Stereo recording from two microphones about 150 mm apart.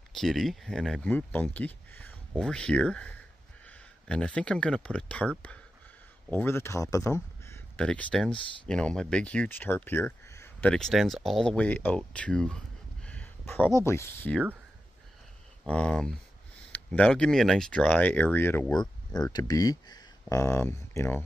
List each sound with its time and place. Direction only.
0.1 s speech: centre (ahead or behind)
6.3 s speech: 15° left (ahead or behind)
7.4 s a sound: 15° left (ahead or behind)
7.8 s speech: 5° left (ahead or behind)
10.7 s speech: centre (ahead or behind); by 14.3 s 20° left (ahead or behind)
15.6 s speech: 5° left (ahead or behind)
18.7 s speech: 25° left (ahead or behind)